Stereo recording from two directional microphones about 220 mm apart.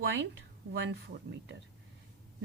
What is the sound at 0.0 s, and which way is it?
A man's voice, 55° right (ahead or behind).